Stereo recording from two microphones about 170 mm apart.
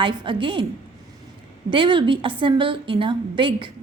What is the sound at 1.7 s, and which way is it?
A woman's voice, 30° right (ahead or behind).